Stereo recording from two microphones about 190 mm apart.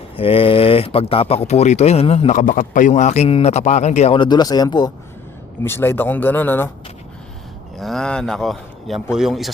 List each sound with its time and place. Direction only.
0.2 s speech: 30° left (ahead or behind); by 6.7 s 10° left (ahead or behind)
7.8 s speech: centre (ahead or behind)